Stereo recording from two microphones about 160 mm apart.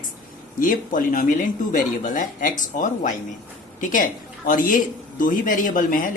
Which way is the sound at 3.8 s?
55° left (ahead or behind).